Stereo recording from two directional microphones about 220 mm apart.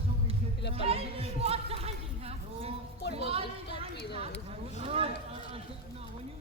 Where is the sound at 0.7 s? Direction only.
25° right (ahead or behind).